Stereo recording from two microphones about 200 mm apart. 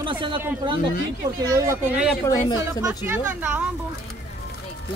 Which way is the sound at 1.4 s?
20° right (ahead or behind).